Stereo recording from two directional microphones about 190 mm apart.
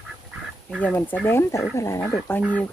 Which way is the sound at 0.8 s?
10° left (ahead or behind).